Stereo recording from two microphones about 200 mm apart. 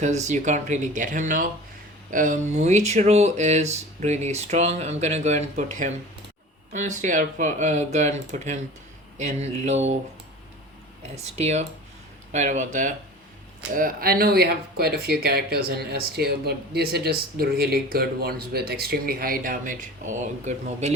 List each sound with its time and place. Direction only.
0.0 s speech: 35° right (ahead or behind)
11.1 s speech: 35° right (ahead or behind)